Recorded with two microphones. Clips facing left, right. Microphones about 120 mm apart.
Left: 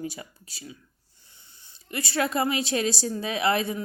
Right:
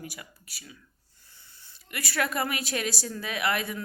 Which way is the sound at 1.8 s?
25° left (ahead or behind).